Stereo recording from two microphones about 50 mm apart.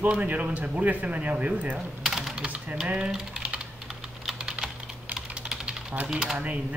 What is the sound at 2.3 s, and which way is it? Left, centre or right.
Typewriter, right.